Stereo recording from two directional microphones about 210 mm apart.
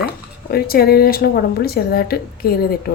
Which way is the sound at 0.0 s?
45° left (ahead or behind).